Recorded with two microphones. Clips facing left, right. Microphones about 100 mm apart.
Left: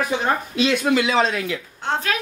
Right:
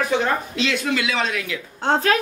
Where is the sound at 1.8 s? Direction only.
35° right (ahead or behind).